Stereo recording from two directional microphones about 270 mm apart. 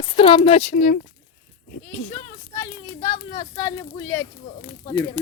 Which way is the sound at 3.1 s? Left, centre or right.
Left.